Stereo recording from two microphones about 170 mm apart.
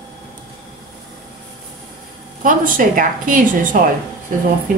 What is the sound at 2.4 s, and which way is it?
Speech, 55° right (ahead or behind).